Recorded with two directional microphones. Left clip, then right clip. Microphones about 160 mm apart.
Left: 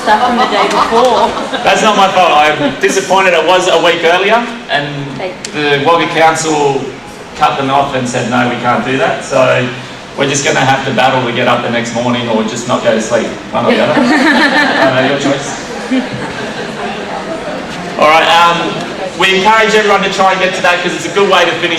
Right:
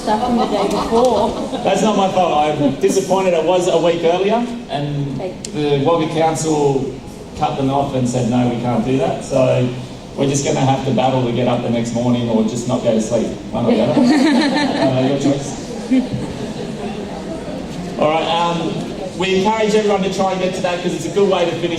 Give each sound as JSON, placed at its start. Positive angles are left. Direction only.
{"t": 0.1, "sound": "speech", "side_deg": 25}
{"t": 14.1, "sound": "speech", "side_deg": -5}
{"t": 14.7, "sound": "speech", "side_deg": 30}
{"t": 18.0, "sound": "speech", "side_deg": 35}